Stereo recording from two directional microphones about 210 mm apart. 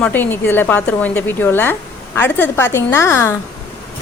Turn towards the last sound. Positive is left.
turn(degrees=10)  # may be behind; listen again after turning